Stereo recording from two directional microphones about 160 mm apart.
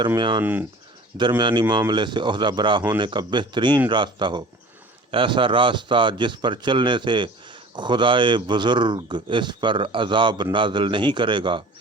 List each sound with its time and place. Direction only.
0.2 s a man's voice: 30° right (ahead or behind)
0.4 s speech: 10° right (ahead or behind)
1.2 s a man's voice: 30° right (ahead or behind)